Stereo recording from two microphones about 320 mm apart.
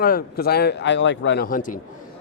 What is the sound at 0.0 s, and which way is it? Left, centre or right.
Speech, left.